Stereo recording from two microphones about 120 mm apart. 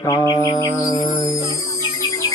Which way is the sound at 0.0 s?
30° left (ahead or behind).